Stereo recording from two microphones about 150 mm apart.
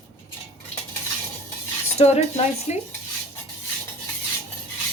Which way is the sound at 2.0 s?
45° left (ahead or behind).